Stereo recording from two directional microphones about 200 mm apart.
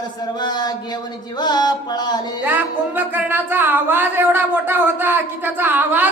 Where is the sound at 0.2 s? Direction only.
20° left (ahead or behind).